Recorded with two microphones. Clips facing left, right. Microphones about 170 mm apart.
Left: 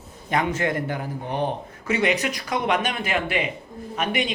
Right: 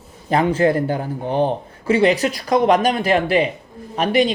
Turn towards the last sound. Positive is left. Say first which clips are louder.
# right 8 dB
turn(degrees=-35)  # may be behind; listen again after turning